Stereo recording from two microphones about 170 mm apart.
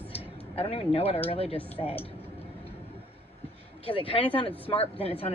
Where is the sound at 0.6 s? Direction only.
35° left (ahead or behind).